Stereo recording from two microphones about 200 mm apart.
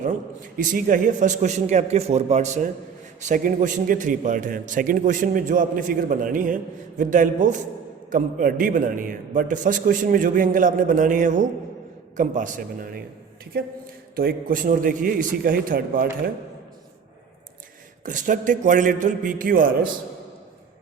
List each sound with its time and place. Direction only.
0.0 s a man's voice: 40° right (ahead or behind)
14.2 s a man's voice: 45° right (ahead or behind)
18.0 s a man's voice: 40° right (ahead or behind)